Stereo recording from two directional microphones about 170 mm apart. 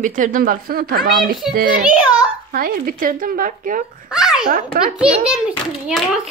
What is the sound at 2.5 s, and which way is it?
Speech, 60° right (ahead or behind).